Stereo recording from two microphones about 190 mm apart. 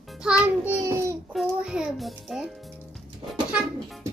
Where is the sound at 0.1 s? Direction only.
5° right (ahead or behind).